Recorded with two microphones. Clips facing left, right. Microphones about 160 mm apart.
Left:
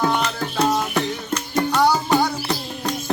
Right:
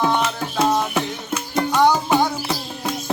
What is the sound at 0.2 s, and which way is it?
Music, 5° right (ahead or behind).